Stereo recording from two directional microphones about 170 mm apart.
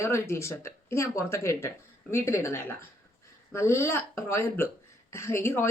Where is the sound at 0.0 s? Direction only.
15° left (ahead or behind).